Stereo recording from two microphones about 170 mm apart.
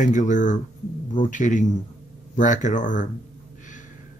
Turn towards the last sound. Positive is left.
turn(degrees=50)  # may be behind; listen again after turning